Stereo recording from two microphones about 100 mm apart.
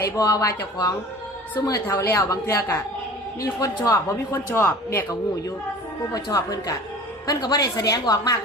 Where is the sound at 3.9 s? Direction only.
25° left (ahead or behind).